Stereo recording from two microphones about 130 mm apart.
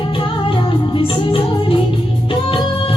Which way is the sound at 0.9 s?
45° left (ahead or behind).